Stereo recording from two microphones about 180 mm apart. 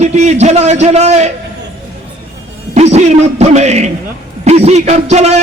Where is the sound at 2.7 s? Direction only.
40° right (ahead or behind).